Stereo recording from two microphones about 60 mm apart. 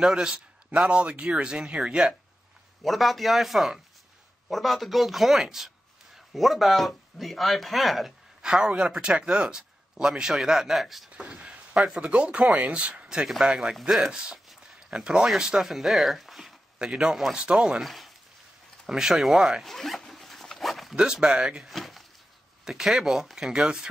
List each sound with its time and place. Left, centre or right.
0.0 s a man's voice: centre
8.4 s a man's voice: centre
11.1 s a man's voice: centre
13.3 s speech: centre
14.1 s a man's voice: centre
16.7 s a man's voice: centre
17.1 s speech: centre
17.4 s a man's voice: centre
17.6 s a man's voice: centre
19.7 s zipper: centre
20.9 s a man's voice: centre